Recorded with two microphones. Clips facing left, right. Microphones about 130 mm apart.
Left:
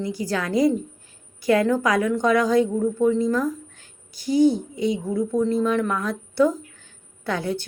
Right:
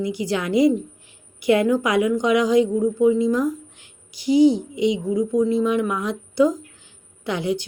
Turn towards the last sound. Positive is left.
turn(degrees=-15)  # may be behind; listen again after turning